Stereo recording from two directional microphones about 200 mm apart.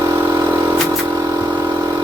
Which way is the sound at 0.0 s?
15° right (ahead or behind).